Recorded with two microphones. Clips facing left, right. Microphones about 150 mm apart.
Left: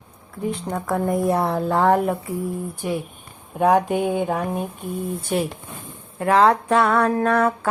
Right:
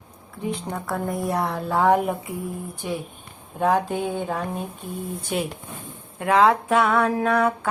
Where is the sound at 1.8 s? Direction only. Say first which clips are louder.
Right 1 dB; 10° right (ahead or behind).